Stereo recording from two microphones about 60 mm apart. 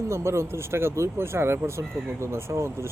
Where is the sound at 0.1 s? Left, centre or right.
Right.